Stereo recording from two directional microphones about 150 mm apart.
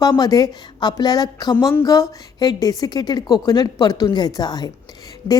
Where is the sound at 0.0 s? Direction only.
25° left (ahead or behind).